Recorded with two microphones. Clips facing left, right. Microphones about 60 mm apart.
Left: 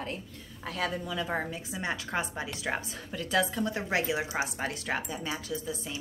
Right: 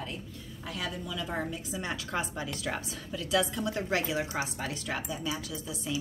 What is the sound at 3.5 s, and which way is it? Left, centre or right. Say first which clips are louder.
Speech: left 1 dB; left.